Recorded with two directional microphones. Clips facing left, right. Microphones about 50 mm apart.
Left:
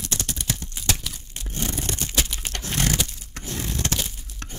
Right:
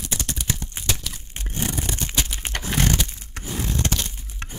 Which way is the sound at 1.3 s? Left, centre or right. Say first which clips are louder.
Right 2 dB; right.